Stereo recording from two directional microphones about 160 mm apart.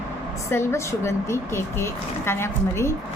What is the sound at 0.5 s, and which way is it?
A woman's voice, 15° left (ahead or behind).